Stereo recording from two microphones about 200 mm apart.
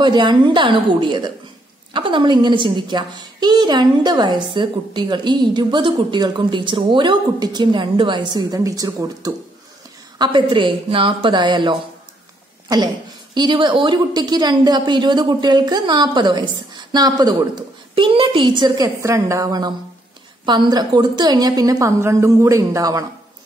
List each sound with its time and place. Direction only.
0.0 s a woman's voice: 20° right (ahead or behind)